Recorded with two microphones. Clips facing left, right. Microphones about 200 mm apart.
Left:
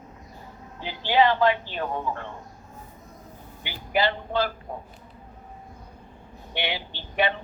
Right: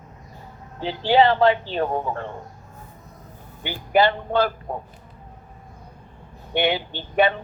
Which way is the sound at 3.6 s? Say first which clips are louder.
Right 6 dB; 50° right (ahead or behind).